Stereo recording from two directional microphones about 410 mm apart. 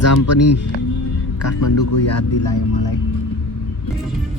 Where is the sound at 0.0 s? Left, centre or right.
Left.